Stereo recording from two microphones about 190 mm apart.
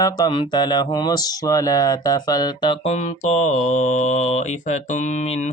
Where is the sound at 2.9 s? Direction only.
35° left (ahead or behind).